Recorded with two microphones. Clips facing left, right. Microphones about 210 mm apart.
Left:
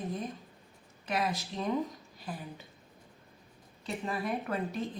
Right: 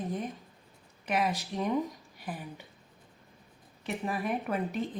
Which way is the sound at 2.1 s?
15° right (ahead or behind).